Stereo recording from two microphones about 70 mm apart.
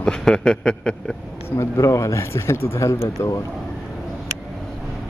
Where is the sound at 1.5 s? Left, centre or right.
Left.